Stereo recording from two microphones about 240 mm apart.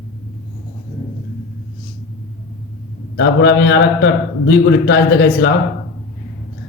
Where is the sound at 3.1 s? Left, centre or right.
Left.